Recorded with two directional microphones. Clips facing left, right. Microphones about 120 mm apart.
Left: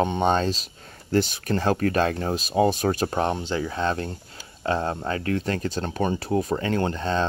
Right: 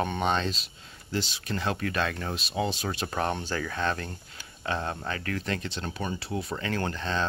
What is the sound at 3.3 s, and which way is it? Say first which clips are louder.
Speech: left 5 dB; 20° left (ahead or behind).